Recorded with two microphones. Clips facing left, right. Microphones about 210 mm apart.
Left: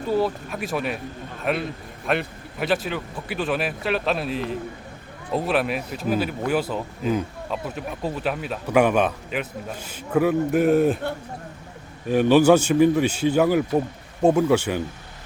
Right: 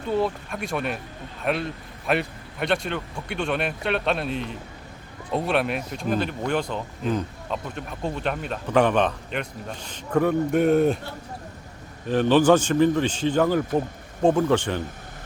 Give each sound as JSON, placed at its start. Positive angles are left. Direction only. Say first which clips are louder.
{"t": 0.1, "sound": "speech", "louder": "left 1 dB", "side_deg": 5}
{"t": 12.0, "sound": "a man's voice", "louder": "left 2 dB", "side_deg": 10}